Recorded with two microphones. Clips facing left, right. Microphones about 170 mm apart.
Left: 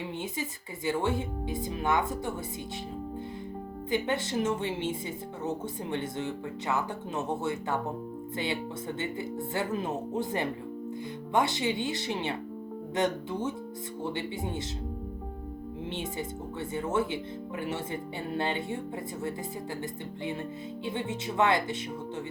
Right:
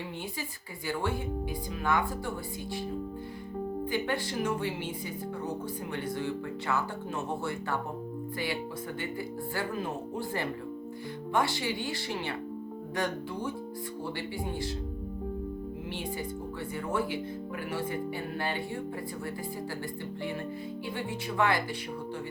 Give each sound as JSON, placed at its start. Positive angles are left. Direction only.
{"t": 1.8, "sound": "speech", "side_deg": 20}
{"t": 3.9, "sound": "speech", "side_deg": 20}
{"t": 9.6, "sound": "speech", "side_deg": 20}
{"t": 16.7, "sound": "speech", "side_deg": 25}
{"t": 20.8, "sound": "speech", "side_deg": 20}